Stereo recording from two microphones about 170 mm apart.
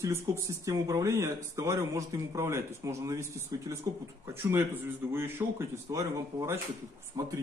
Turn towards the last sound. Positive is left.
turn(degrees=-20)  # may be behind; listen again after turning